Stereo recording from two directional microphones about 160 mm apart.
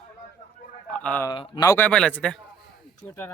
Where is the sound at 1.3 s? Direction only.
25° left (ahead or behind).